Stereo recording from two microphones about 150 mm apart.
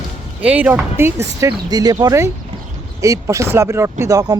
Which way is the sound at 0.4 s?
10° right (ahead or behind).